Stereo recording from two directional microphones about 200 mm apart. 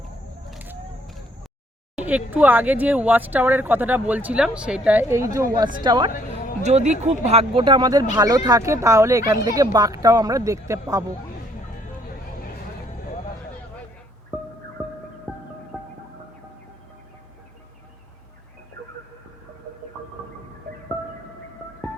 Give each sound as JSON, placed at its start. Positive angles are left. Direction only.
{"t": 0.5, "sound": "a sound", "side_deg": -5}
{"t": 2.0, "sound": "speech", "side_deg": -10}
{"t": 6.6, "sound": "speech", "side_deg": -35}
{"t": 15.3, "sound": "music", "side_deg": 5}